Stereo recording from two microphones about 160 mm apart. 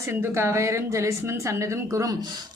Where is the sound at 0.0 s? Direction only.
15° right (ahead or behind).